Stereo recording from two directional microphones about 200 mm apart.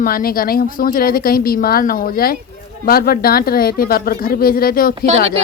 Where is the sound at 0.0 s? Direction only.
45° left (ahead or behind).